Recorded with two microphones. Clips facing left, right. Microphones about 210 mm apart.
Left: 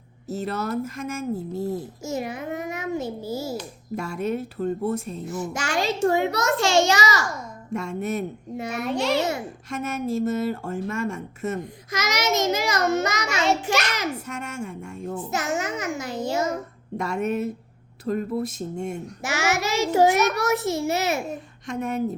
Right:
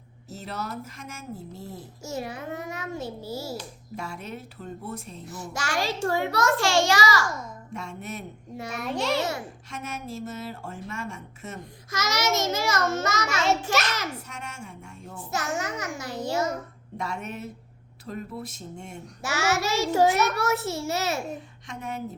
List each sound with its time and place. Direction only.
0.3 s speech: 50° left (ahead or behind)
2.0 s a child's voice: 20° left (ahead or behind)
3.9 s speech: 45° left (ahead or behind)
5.2 s a child's voice: 20° left (ahead or behind)
7.7 s speech: 45° left (ahead or behind)
8.7 s a child's voice: centre (ahead or behind)
9.6 s speech: 50° left (ahead or behind)
11.9 s a child's voice: 20° left (ahead or behind)
13.4 s a child's voice: centre (ahead or behind)
14.3 s speech: 45° left (ahead or behind)
15.3 s a child's voice: 20° left (ahead or behind)
17.0 s speech: 45° left (ahead or behind)
19.2 s a child's voice: 20° left (ahead or behind)
21.7 s speech: 50° left (ahead or behind)